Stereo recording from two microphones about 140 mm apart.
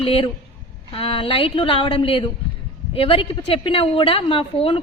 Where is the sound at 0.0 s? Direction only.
45° left (ahead or behind).